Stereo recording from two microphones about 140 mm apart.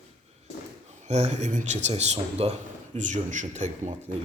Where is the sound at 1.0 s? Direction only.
55° right (ahead or behind).